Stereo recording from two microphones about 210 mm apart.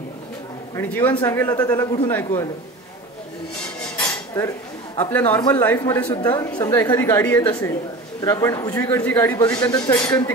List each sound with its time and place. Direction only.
0.7 s a woman's voice: 10° left (ahead or behind)
4.9 s a woman's voice: 10° left (ahead or behind)
6.0 s a woman's voice: 20° left (ahead or behind)